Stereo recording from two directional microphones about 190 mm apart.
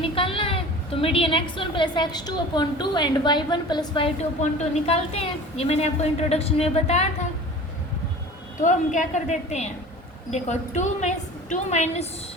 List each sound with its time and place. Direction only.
0.0 s a woman's voice: 30° left (ahead or behind)
8.6 s a woman's voice: 40° left (ahead or behind)